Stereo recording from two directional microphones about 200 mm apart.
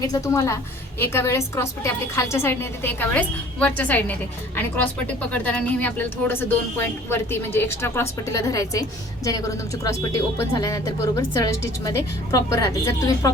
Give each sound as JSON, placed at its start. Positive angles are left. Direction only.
{"t": 0.0, "sound": "speech", "side_deg": 15}